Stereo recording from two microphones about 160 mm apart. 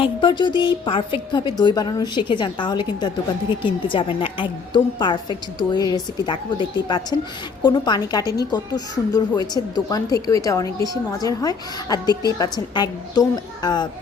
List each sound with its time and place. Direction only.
0.0 s a woman's voice: 30° left (ahead or behind)